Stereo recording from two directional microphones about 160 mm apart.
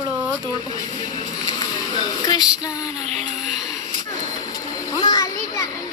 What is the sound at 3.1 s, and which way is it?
Speech, 5° right (ahead or behind).